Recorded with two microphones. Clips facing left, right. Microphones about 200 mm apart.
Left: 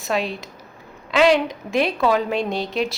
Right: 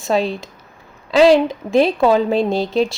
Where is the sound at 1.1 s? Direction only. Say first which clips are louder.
Right 5 dB; 35° right (ahead or behind).